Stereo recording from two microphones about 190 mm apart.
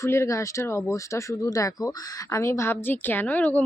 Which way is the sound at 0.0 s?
15° left (ahead or behind).